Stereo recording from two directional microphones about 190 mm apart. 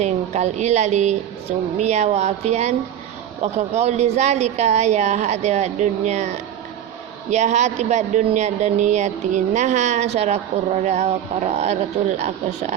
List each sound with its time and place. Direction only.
0.0 s speech: 35° right (ahead or behind)